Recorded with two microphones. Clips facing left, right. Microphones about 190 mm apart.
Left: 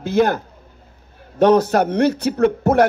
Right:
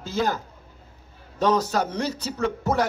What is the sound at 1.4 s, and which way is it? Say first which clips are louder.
A man's voice: left 8 dB; 60° left (ahead or behind).